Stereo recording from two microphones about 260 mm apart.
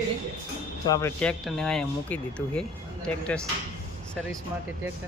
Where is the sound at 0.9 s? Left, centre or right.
Centre.